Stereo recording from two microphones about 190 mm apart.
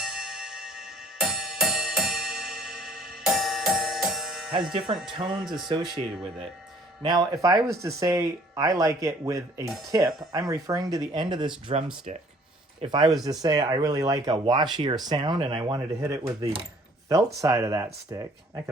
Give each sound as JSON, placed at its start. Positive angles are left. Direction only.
{"t": 0.0, "sound": "music", "side_deg": 0}
{"t": 4.9, "sound": "speech", "side_deg": 0}
{"t": 6.0, "sound": "speech", "side_deg": -30}
{"t": 12.1, "sound": "speech", "side_deg": -35}
{"t": 12.8, "sound": "speech", "side_deg": -25}
{"t": 16.2, "sound": "speech", "side_deg": -30}
{"t": 17.1, "sound": "speech", "side_deg": -15}